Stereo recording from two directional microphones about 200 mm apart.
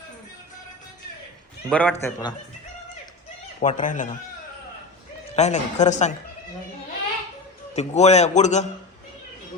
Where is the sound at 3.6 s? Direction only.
40° left (ahead or behind).